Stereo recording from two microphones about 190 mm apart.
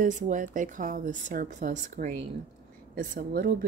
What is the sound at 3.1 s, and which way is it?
Speech, 55° right (ahead or behind).